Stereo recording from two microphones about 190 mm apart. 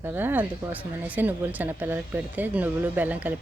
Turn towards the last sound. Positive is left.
turn(degrees=-10)  # may be behind; listen again after turning